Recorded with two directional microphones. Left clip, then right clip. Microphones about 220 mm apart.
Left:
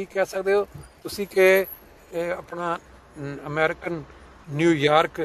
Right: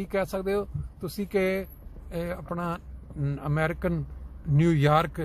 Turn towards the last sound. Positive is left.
turn(degrees=5)  # may be behind; listen again after turning